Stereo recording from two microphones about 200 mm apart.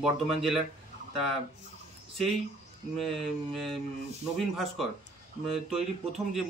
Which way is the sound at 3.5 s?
Centre (ahead or behind).